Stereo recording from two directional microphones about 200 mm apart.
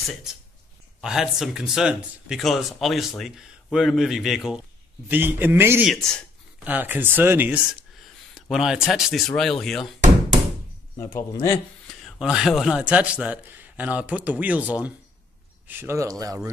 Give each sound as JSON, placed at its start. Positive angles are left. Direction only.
{"t": 0.1, "sound": "a man's voice", "side_deg": -5}
{"t": 11.4, "sound": "speech", "side_deg": 10}
{"t": 12.0, "sound": "a man's voice", "side_deg": 0}